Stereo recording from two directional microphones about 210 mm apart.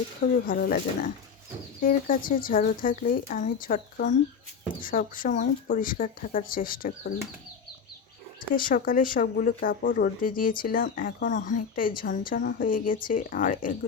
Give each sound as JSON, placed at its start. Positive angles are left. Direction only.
{"t": 0.3, "sound": "speech", "side_deg": 45}
{"t": 8.5, "sound": "speech", "side_deg": 40}